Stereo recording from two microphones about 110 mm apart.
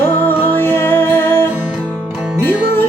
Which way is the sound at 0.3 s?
20° left (ahead or behind).